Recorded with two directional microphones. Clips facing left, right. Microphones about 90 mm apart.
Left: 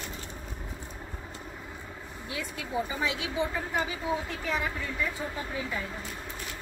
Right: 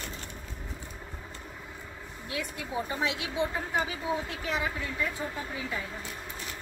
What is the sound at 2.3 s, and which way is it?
Speech, centre (ahead or behind).